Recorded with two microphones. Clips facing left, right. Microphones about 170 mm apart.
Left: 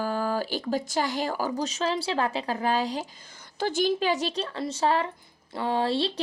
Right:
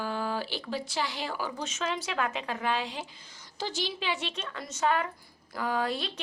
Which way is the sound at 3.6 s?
55° left (ahead or behind).